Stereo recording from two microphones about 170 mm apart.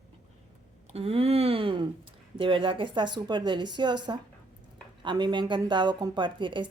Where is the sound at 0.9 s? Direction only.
35° right (ahead or behind).